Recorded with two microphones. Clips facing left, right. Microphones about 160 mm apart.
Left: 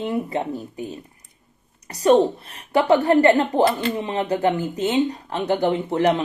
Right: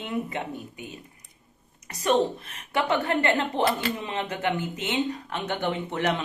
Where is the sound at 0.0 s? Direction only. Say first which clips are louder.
Left 6 dB; 35° left (ahead or behind).